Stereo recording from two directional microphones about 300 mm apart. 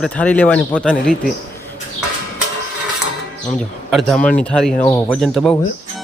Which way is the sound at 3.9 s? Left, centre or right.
Centre.